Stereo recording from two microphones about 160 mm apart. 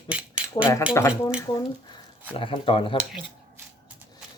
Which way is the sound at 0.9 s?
20° left (ahead or behind).